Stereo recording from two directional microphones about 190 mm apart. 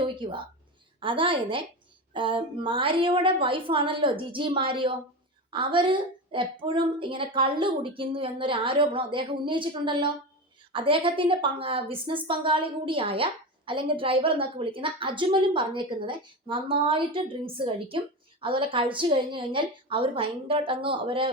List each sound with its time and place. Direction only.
0.0 s a woman's voice: 25° right (ahead or behind)